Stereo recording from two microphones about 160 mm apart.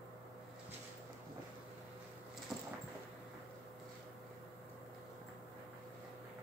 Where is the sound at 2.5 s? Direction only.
Centre (ahead or behind).